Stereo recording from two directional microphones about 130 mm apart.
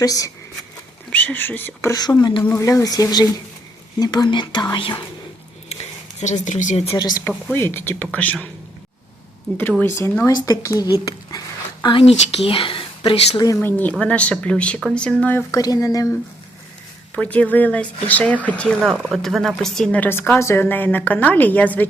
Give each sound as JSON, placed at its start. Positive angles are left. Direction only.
{"t": 0.0, "sound": "speech", "side_deg": 25}
{"t": 1.1, "sound": "speech", "side_deg": 10}
{"t": 6.1, "sound": "speech", "side_deg": 65}
{"t": 6.7, "sound": "speech", "side_deg": 50}
{"t": 7.5, "sound": "a woman's voice", "side_deg": 15}
{"t": 9.8, "sound": "speech", "side_deg": 20}
{"t": 11.0, "sound": "a sound", "side_deg": 30}
{"t": 12.1, "sound": "speech", "side_deg": 50}
{"t": 13.6, "sound": "a woman's voice", "side_deg": 15}
{"t": 15.5, "sound": "speech", "side_deg": 30}
{"t": 17.2, "sound": "a woman's voice", "side_deg": 10}
{"t": 18.8, "sound": "a woman's voice", "side_deg": 0}